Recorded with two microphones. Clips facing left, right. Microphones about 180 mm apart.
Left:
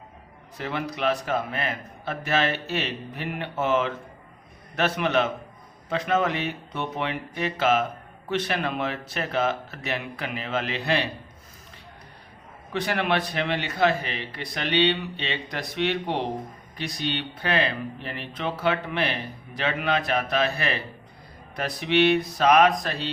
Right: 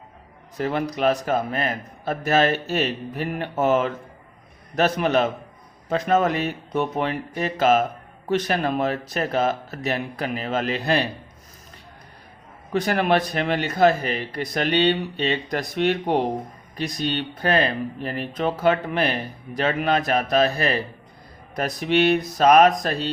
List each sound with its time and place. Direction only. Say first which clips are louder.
0.5 s speech: right 6 dB; 40° right (ahead or behind)
12.7 s speech: right 5 dB; 45° right (ahead or behind)